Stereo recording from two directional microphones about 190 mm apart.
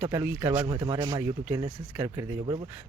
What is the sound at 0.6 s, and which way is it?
Speech, 20° right (ahead or behind).